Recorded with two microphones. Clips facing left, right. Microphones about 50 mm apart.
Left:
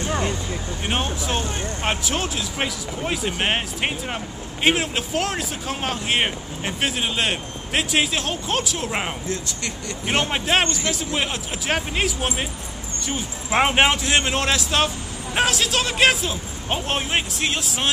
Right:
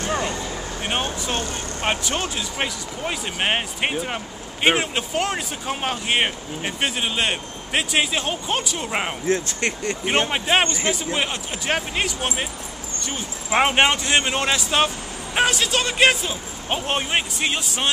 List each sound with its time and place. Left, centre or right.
0.8 s speech: centre
9.3 s speech: right
10.0 s speech: centre